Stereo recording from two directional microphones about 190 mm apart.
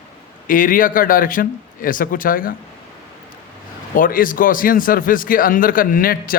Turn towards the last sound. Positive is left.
turn(degrees=50)  # may be behind; listen again after turning